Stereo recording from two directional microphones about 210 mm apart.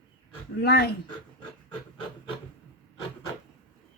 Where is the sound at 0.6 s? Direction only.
50° left (ahead or behind).